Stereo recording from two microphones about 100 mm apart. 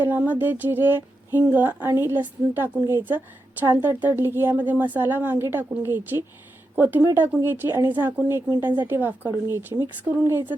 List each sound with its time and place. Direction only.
0.0 s speech: 20° right (ahead or behind)